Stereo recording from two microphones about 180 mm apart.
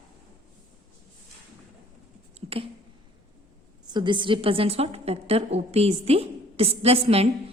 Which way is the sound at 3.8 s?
25° right (ahead or behind).